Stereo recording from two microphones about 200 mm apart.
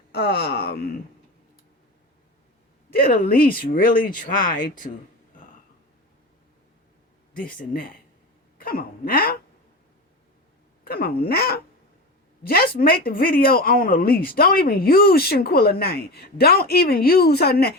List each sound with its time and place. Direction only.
0.1 s speech: 55° left (ahead or behind)
2.9 s speech: 45° left (ahead or behind)
7.5 s speech: 45° left (ahead or behind)
10.8 s speech: 50° left (ahead or behind)